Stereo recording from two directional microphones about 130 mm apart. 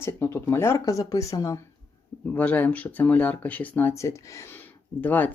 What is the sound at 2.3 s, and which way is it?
Speech, 15° left (ahead or behind).